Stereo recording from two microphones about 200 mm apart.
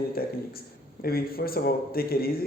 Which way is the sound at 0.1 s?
50° left (ahead or behind).